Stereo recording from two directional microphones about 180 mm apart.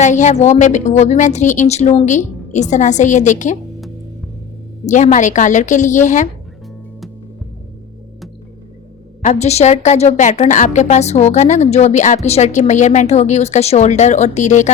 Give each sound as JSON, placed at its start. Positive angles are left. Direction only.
{"t": 0.0, "sound": "a woman's voice", "side_deg": 40}
{"t": 4.9, "sound": "a woman's voice", "side_deg": 40}
{"t": 9.2, "sound": "a woman's voice", "side_deg": 40}